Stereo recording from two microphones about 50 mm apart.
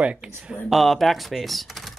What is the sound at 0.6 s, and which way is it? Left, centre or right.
Speech, centre.